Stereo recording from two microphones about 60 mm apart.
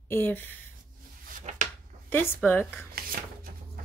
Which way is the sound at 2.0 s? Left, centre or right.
Left.